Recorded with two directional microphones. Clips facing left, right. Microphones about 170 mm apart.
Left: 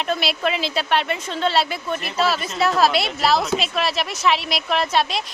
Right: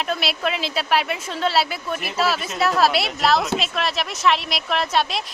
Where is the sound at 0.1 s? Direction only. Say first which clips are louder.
Left 2 dB; centre (ahead or behind).